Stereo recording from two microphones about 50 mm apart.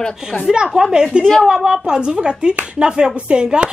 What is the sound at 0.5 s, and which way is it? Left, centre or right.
A woman's voice, centre.